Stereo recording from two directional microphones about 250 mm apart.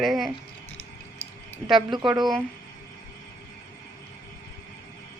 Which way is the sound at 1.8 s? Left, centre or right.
Centre.